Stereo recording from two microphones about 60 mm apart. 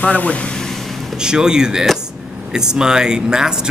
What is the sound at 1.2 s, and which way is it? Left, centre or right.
Speech, centre.